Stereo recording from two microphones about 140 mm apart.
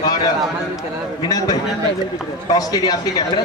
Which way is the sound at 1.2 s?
25° left (ahead or behind).